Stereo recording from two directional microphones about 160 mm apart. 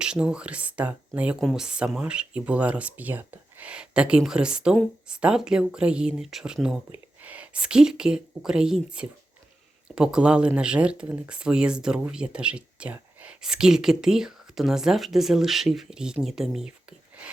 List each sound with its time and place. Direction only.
0.0 s speech: 5° right (ahead or behind)